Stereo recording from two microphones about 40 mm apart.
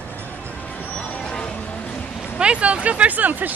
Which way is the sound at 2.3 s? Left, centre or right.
Right.